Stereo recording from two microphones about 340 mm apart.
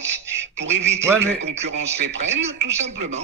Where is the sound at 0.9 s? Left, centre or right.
Centre.